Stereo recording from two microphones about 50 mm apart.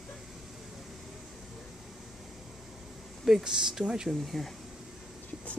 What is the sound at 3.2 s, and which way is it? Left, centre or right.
Speech, centre.